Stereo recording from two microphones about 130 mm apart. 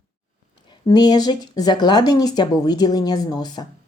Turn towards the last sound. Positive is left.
turn(degrees=35)  # may be behind; listen again after turning